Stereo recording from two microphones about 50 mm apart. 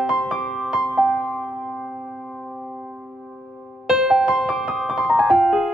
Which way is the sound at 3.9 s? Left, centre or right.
Centre.